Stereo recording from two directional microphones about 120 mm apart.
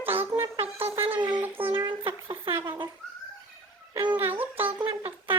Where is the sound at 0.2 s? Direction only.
20° right (ahead or behind).